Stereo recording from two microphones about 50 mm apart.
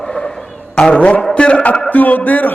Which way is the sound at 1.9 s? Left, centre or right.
Left.